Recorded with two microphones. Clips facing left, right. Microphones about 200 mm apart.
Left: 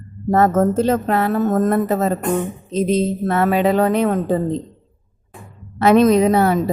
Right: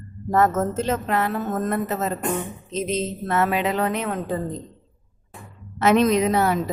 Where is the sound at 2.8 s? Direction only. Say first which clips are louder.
Left 8 dB; 35° left (ahead or behind).